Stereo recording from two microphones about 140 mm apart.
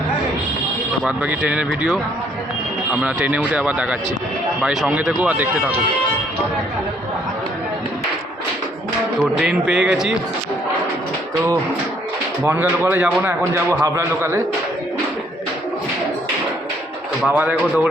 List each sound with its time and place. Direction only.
1.0 s speech: 10° right (ahead or behind)
9.4 s speech: 5° right (ahead or behind)
12.4 s a man's voice: 10° right (ahead or behind)
17.2 s speech: 10° right (ahead or behind)